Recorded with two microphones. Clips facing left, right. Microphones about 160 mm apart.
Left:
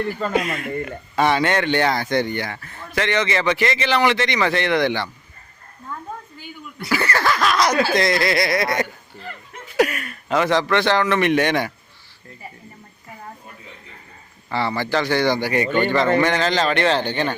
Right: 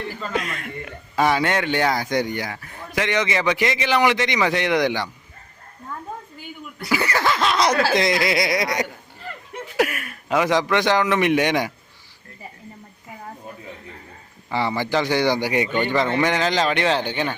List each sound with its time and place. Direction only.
0.3 s speech: 5° left (ahead or behind)
1.1 s speech: 5° right (ahead or behind)
6.9 s speech: 15° right (ahead or behind)
8.0 s speech: 15° right (ahead or behind)
9.7 s a man's voice: 5° right (ahead or behind)
14.5 s speech: 15° right (ahead or behind)